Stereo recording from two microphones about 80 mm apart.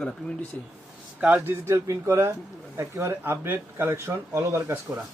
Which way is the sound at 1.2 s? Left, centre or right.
Centre.